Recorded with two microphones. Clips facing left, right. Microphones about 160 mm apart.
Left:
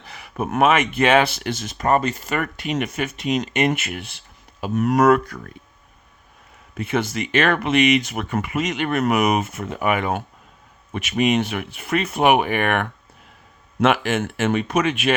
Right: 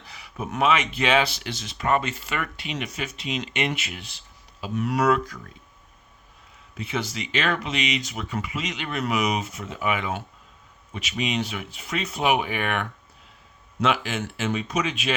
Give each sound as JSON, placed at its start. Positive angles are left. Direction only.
{"t": 0.0, "sound": "speech", "side_deg": 55}
{"t": 4.6, "sound": "speech", "side_deg": 45}
{"t": 6.7, "sound": "speech", "side_deg": 55}